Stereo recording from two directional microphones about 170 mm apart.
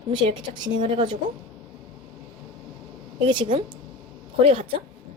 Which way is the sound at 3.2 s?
30° right (ahead or behind).